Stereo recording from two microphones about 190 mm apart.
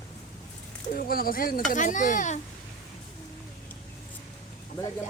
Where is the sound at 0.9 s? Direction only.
50° left (ahead or behind).